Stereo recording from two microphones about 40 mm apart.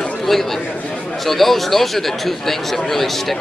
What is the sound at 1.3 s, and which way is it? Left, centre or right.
Speech, centre.